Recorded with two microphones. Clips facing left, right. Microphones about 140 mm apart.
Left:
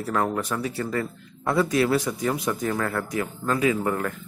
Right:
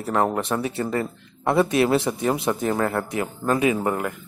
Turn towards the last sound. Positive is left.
turn(degrees=-20)  # may be behind; listen again after turning